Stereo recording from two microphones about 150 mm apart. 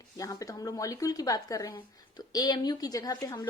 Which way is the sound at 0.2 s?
25° left (ahead or behind).